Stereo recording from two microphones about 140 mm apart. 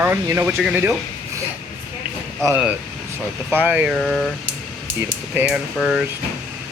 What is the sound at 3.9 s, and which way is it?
Speech, 5° left (ahead or behind).